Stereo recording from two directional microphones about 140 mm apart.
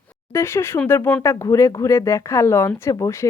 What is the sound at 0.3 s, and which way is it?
Speech, 20° left (ahead or behind).